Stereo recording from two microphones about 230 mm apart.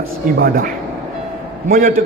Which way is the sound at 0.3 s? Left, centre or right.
Right.